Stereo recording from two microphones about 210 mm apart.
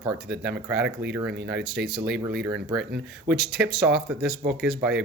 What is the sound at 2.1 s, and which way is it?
Speech, 55° right (ahead or behind).